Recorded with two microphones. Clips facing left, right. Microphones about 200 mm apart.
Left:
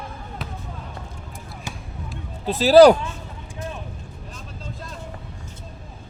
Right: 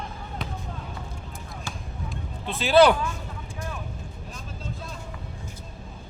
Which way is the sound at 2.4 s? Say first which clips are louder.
Left 7 dB; 40° left (ahead or behind).